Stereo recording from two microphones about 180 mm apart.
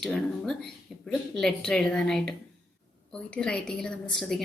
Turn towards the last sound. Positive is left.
turn(degrees=0)  # may be behind; listen again after turning